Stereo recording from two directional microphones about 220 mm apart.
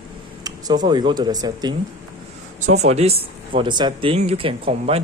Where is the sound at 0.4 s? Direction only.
20° right (ahead or behind).